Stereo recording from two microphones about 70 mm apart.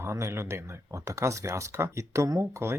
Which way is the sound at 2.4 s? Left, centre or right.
Right.